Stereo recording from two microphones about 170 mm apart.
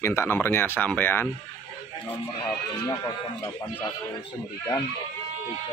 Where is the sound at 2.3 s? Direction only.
25° left (ahead or behind).